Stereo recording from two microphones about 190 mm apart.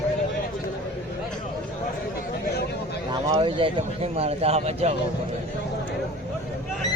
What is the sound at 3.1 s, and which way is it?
A man's voice, 25° right (ahead or behind).